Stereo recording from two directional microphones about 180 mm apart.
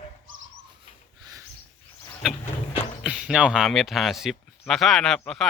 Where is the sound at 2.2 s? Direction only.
5° right (ahead or behind).